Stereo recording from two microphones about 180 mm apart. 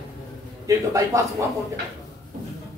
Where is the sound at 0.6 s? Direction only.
15° right (ahead or behind).